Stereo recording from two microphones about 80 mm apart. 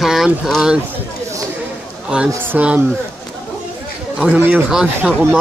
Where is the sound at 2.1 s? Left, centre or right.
Centre.